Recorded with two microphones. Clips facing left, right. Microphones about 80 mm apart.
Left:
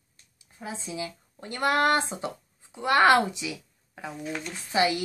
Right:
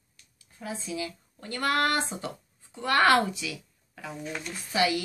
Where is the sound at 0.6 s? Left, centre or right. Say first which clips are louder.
Even; left.